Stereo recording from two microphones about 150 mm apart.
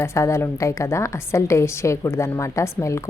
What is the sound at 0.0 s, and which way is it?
A woman's voice, 20° left (ahead or behind).